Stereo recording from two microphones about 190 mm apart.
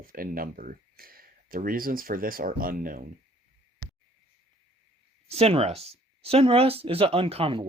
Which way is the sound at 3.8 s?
20° left (ahead or behind).